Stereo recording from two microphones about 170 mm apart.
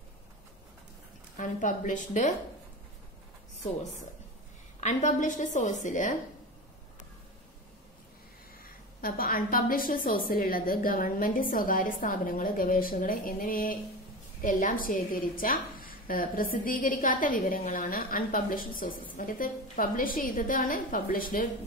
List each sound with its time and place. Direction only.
1.3 s a woman's voice: 50° left (ahead or behind)
4.7 s a woman's voice: 45° left (ahead or behind)
9.0 s a woman's voice: 60° left (ahead or behind)